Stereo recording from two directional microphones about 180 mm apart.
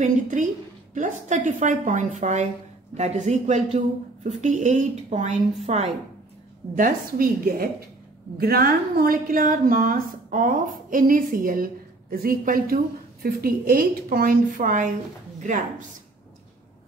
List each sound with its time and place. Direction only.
0.0 s a woman's voice: 45° right (ahead or behind)
6.7 s speech: 50° right (ahead or behind)